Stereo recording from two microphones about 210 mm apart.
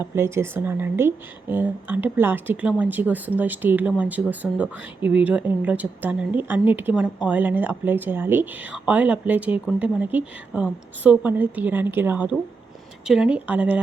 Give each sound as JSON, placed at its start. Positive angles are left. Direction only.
{"t": 0.0, "sound": "speech", "side_deg": -10}